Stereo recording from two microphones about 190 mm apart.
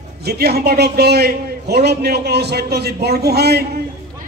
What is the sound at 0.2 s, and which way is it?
A man's voice, 55° right (ahead or behind).